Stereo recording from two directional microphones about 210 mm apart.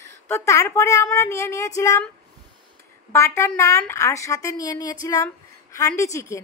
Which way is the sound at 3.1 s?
15° left (ahead or behind).